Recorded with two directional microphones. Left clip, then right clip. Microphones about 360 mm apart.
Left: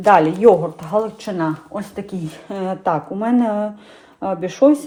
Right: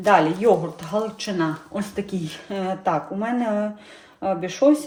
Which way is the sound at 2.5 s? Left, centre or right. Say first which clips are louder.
Left 3 dB; centre.